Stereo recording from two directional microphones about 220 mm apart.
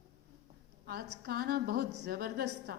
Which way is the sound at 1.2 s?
45° right (ahead or behind).